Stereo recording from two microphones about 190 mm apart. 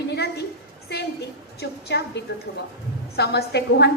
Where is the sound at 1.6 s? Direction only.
60° left (ahead or behind).